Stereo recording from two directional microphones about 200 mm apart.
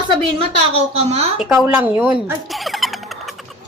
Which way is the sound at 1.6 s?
10° right (ahead or behind).